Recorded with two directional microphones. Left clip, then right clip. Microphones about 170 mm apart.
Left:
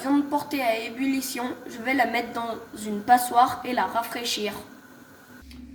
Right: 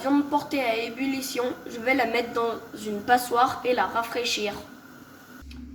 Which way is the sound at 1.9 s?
55° left (ahead or behind).